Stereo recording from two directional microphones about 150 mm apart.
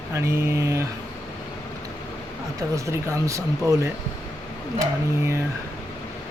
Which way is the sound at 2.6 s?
20° right (ahead or behind).